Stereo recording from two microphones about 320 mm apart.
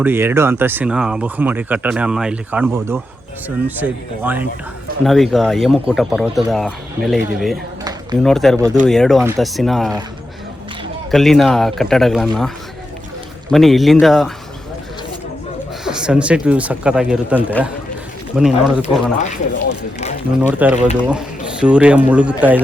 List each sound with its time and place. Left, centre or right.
0.0 s speech: centre
11.1 s speech: centre
13.5 s speech: centre
15.8 s speech: centre
18.8 s speech: left
20.5 s speech: centre